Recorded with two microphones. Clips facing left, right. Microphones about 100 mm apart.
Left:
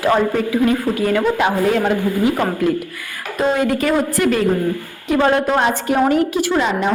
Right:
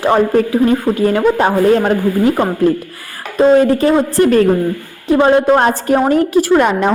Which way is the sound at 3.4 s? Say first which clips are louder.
Right 8 dB; 35° right (ahead or behind).